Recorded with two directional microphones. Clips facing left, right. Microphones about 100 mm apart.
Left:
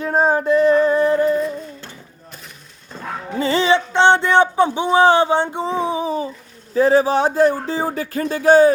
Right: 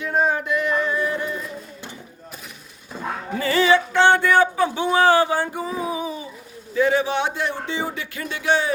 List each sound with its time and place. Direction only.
0.0 s a sound: 35° left (ahead or behind)
2.9 s dog: 5° right (ahead or behind)
3.3 s speech: 25° left (ahead or behind); by 8.7 s 40° left (ahead or behind)